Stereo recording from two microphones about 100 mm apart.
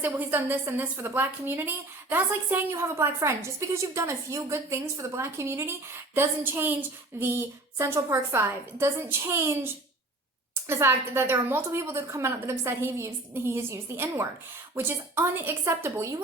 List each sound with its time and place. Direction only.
0.0 s a woman's voice: 20° right (ahead or behind)